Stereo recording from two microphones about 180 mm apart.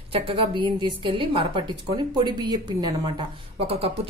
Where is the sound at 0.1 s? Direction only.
30° right (ahead or behind).